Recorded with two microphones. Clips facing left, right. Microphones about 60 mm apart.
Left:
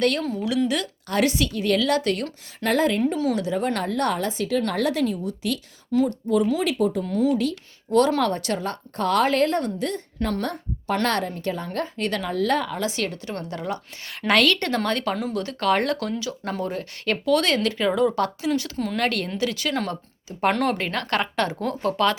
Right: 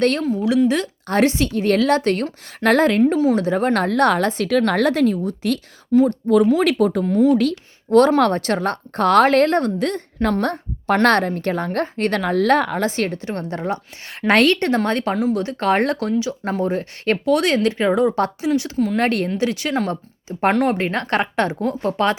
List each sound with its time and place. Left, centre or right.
0.0 s a woman's voice: right
2.6 s a woman's voice: right
3.8 s a woman's voice: right
6.1 s a woman's voice: right
7.0 s a woman's voice: right
7.3 s a woman's voice: right
15.1 s speech: centre
15.4 s a woman's voice: right
20.5 s speech: centre
20.7 s speech: right